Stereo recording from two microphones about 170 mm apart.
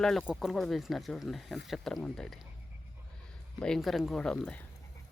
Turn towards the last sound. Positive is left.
turn(degrees=5)  # may be behind; listen again after turning